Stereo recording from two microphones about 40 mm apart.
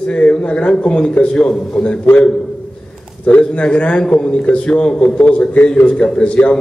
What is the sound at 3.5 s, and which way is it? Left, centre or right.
A man's voice, left.